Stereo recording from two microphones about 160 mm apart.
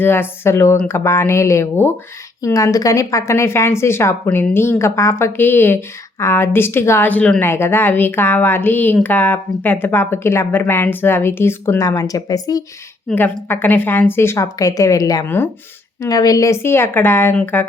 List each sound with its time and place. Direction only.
0.0 s a woman's voice: 15° left (ahead or behind)
13.1 s a woman's voice: 10° left (ahead or behind)